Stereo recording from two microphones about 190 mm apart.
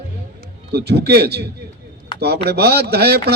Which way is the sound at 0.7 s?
60° right (ahead or behind).